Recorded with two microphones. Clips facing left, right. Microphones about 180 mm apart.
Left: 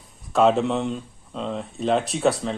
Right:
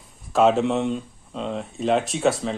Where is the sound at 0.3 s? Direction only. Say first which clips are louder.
Even; centre (ahead or behind).